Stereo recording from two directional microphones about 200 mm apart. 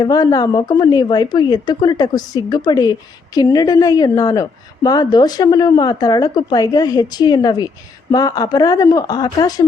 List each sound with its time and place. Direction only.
0.0 s a woman's voice: 20° left (ahead or behind)